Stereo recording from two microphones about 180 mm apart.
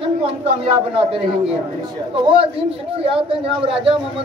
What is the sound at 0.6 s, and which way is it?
A man's voice, 30° right (ahead or behind).